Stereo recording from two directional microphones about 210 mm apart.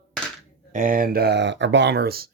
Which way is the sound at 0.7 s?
40° right (ahead or behind).